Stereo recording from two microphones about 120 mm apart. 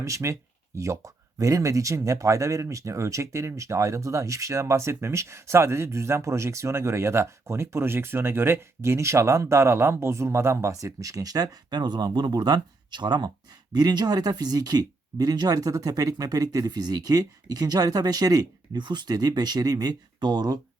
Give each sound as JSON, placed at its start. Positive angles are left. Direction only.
{"t": 0.0, "sound": "speech", "side_deg": -25}